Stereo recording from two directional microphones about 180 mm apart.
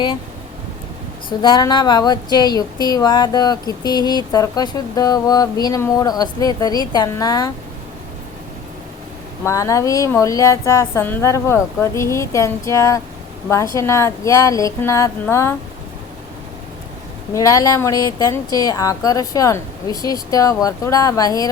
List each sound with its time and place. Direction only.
1.3 s a woman's voice: 25° left (ahead or behind)
9.4 s a woman's voice: 15° left (ahead or behind)
17.3 s a woman's voice: 20° left (ahead or behind)